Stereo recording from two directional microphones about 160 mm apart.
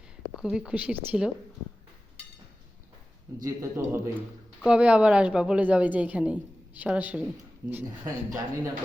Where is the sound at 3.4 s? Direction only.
15° right (ahead or behind).